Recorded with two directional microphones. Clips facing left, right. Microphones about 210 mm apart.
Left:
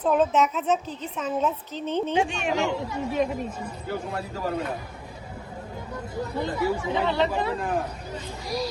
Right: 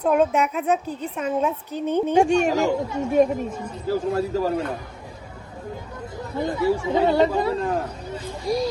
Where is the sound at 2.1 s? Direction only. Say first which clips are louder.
Right 7 dB; 45° right (ahead or behind).